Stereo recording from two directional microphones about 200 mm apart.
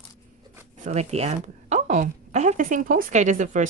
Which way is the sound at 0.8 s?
35° right (ahead or behind).